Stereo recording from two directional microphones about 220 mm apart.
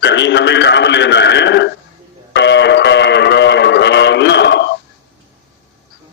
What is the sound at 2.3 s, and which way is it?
Music, 50° left (ahead or behind).